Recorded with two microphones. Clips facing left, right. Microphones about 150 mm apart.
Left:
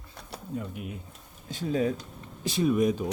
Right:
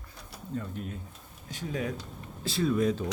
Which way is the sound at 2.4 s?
15° left (ahead or behind).